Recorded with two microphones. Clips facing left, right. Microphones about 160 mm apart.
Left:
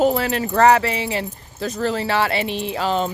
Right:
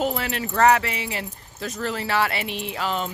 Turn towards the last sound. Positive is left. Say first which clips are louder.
# left 6 dB
turn(degrees=30)  # may be behind; listen again after turning